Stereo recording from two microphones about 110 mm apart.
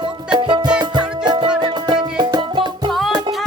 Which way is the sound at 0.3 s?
45° right (ahead or behind).